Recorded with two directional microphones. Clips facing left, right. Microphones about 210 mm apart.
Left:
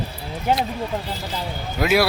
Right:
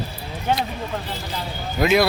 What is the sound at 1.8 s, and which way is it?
Speech, 5° left (ahead or behind).